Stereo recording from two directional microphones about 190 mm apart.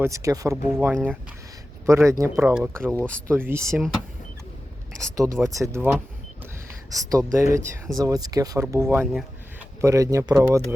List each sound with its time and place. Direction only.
0.0 s speech: 15° right (ahead or behind)
5.1 s speech: 15° right (ahead or behind)